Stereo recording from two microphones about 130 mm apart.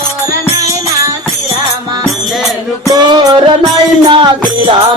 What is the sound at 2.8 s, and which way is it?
Music, 30° right (ahead or behind).